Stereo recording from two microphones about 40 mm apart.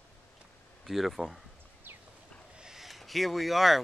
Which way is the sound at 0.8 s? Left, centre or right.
Centre.